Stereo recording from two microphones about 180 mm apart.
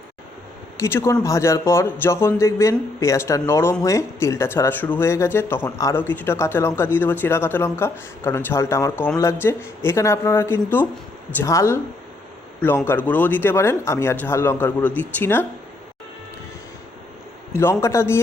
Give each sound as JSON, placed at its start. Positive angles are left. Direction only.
{"t": 0.8, "sound": "a man's voice", "side_deg": 15}
{"t": 17.5, "sound": "a man's voice", "side_deg": 15}